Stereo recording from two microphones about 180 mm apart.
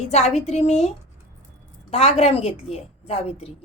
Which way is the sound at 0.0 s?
35° left (ahead or behind).